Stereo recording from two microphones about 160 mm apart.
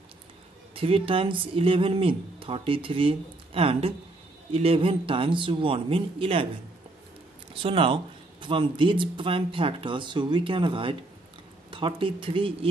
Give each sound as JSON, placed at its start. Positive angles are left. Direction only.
{"t": 0.7, "sound": "speech", "side_deg": -35}
{"t": 7.6, "sound": "speech", "side_deg": -35}